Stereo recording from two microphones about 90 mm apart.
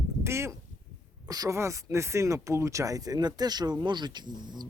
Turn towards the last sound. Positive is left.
turn(degrees=-55)  # may be behind; listen again after turning